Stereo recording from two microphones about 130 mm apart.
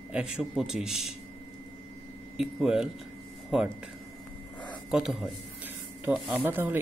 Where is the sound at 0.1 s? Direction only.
5° right (ahead or behind).